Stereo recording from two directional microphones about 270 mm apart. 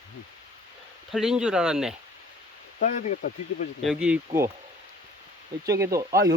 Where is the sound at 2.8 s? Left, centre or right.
Left.